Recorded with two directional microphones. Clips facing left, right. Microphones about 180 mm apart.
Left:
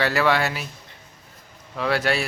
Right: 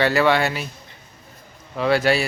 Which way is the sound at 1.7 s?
Centre (ahead or behind).